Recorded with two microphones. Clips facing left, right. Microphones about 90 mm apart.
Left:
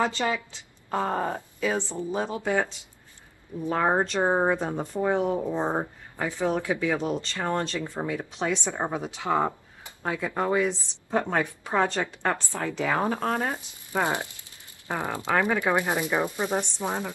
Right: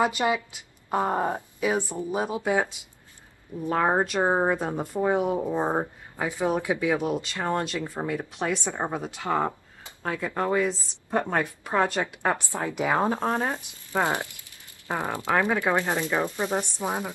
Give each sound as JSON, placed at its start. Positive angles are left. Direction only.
{"t": 0.0, "sound": "a woman's voice", "side_deg": -15}
{"t": 8.7, "sound": "speech", "side_deg": 5}
{"t": 11.1, "sound": "a woman's voice", "side_deg": -5}
{"t": 14.0, "sound": "speech", "side_deg": 20}
{"t": 14.9, "sound": "a woman's voice", "side_deg": -20}
{"t": 15.7, "sound": "speech", "side_deg": 10}
{"t": 16.7, "sound": "a woman's voice", "side_deg": -10}